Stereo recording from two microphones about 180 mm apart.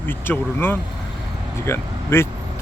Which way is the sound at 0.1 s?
10° left (ahead or behind).